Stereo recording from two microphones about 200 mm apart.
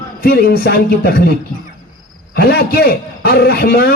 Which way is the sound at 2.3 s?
50° left (ahead or behind).